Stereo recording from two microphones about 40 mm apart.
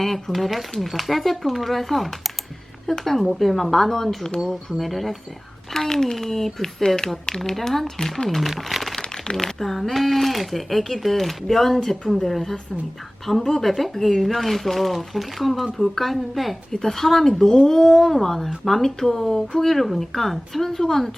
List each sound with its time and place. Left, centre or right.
0.3 s speech: centre
7.5 s speech: centre
9.0 s speech: centre